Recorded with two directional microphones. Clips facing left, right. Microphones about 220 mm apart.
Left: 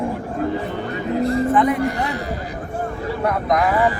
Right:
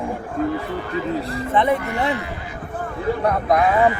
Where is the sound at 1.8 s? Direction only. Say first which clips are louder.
Even; 40° left (ahead or behind).